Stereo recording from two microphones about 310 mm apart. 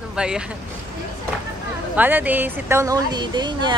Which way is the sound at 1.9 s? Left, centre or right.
Centre.